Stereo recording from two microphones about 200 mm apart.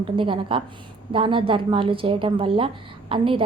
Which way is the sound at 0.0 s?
25° right (ahead or behind).